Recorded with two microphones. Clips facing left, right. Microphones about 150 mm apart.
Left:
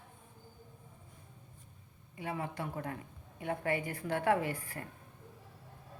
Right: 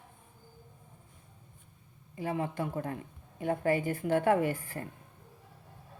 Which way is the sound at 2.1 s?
30° right (ahead or behind).